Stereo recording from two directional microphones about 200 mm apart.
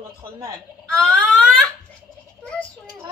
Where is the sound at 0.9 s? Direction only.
5° left (ahead or behind).